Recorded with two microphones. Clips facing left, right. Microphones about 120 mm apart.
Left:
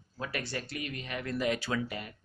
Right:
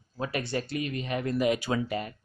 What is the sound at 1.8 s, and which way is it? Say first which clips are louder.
Speech: right 7 dB; 35° right (ahead or behind).